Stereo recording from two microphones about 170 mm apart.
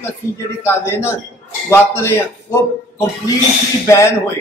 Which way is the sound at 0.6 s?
15° left (ahead or behind).